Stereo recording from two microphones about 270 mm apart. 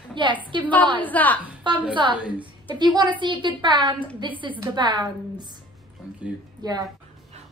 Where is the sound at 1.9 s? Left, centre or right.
Centre.